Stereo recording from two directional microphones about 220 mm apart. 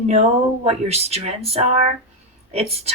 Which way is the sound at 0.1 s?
30° right (ahead or behind).